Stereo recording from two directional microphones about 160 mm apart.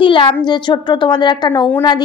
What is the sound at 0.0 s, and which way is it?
A child's voice, 30° left (ahead or behind).